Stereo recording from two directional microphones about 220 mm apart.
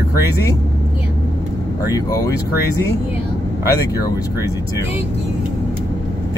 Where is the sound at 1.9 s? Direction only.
15° left (ahead or behind).